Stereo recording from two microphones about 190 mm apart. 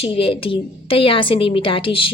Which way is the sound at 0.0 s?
30° left (ahead or behind).